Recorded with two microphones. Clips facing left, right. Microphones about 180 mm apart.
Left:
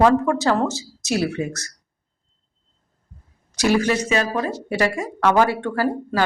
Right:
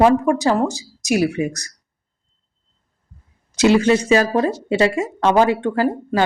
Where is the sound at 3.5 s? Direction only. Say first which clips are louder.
Right 5 dB; 25° right (ahead or behind).